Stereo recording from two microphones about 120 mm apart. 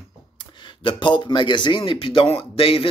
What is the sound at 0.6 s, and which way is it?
Speech, 40° left (ahead or behind).